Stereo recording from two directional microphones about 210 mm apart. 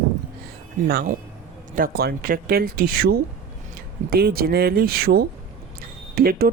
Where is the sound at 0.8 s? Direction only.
45° right (ahead or behind).